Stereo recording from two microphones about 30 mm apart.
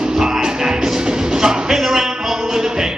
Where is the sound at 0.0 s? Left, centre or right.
Centre.